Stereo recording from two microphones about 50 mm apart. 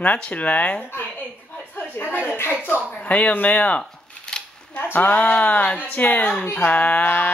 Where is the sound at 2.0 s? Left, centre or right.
Left.